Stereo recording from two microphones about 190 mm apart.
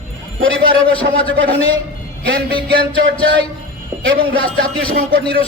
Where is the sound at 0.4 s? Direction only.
90° right.